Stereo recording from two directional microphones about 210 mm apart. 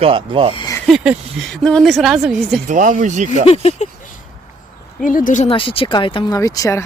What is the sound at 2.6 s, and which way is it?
Speech, 40° right (ahead or behind).